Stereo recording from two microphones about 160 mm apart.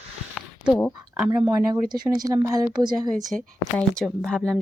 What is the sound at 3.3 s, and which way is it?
A woman's voice, centre (ahead or behind).